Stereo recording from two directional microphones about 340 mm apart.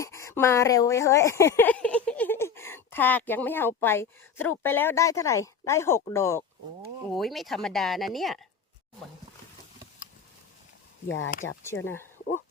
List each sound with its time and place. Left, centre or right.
0.0 s speech: centre
11.1 s speech: left